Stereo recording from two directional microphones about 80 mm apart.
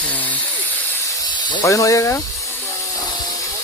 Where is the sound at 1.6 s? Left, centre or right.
Left.